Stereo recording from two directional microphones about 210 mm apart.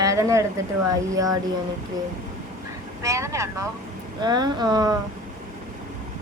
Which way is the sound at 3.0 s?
15° right (ahead or behind).